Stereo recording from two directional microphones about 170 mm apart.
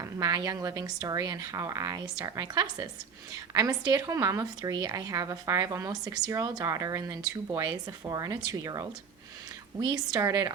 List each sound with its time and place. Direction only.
0.0 s a woman's voice: 20° right (ahead or behind)
9.9 s a woman's voice: 20° right (ahead or behind)